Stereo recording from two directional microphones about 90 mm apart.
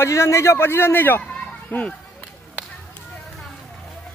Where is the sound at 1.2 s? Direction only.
15° left (ahead or behind).